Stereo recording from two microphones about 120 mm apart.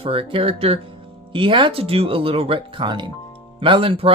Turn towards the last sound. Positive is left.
turn(degrees=-50)  # may be behind; listen again after turning